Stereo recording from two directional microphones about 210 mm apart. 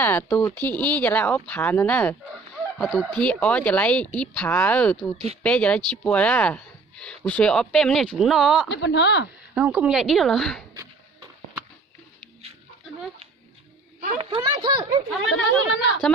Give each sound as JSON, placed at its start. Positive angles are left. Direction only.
{"t": 0.0, "sound": "speech", "side_deg": 10}
{"t": 5.1, "sound": "speech", "side_deg": -30}
{"t": 5.4, "sound": "speech", "side_deg": 5}
{"t": 8.7, "sound": "speech", "side_deg": 60}
{"t": 9.6, "sound": "speech", "side_deg": -5}
{"t": 14.0, "sound": "speech", "side_deg": -30}
{"t": 15.3, "sound": "speech", "side_deg": 60}